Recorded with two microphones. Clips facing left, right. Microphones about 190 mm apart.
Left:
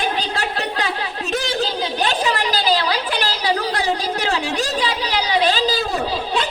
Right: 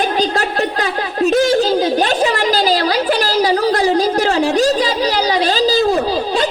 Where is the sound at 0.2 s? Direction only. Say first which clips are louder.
Right 7 dB; 45° right (ahead or behind).